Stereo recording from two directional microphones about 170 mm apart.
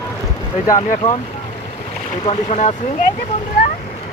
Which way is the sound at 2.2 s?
35° left (ahead or behind).